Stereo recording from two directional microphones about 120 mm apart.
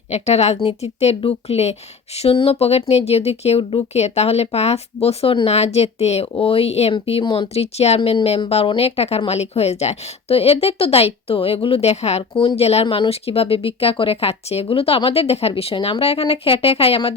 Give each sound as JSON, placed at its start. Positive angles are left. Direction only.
{"t": 0.1, "sound": "speech", "side_deg": 65}
{"t": 6.9, "sound": "speech", "side_deg": 50}